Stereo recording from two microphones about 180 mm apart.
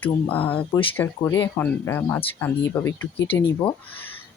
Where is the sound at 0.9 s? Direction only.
10° left (ahead or behind).